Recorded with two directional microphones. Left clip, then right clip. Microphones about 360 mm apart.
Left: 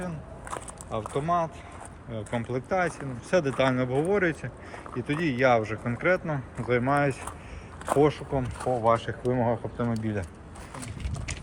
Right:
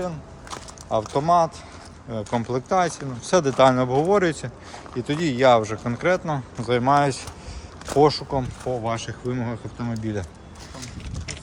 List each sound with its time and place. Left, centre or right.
0.9 s speech: centre
8.7 s speech: centre